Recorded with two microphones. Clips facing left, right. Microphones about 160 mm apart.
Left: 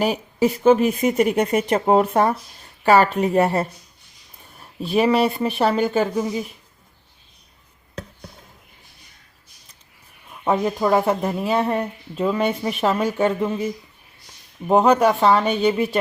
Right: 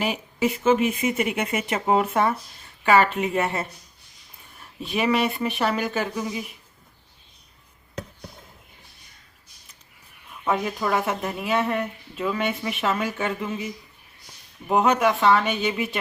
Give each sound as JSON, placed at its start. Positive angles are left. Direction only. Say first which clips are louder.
{"t": 0.0, "sound": "speech", "louder": "left 5 dB", "side_deg": 35}
{"t": 4.9, "sound": "speech", "louder": "left 5 dB", "side_deg": 35}
{"t": 10.4, "sound": "speech", "louder": "left 5 dB", "side_deg": 30}
{"t": 14.7, "sound": "speech", "louder": "left 5 dB", "side_deg": 35}